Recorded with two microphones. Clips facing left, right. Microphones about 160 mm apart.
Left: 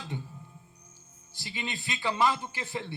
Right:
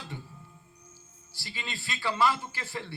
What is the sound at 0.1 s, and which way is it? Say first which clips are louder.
Music: left 6 dB; 20° left (ahead or behind).